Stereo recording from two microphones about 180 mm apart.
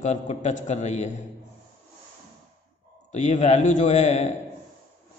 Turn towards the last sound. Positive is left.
turn(degrees=40)  # may be behind; listen again after turning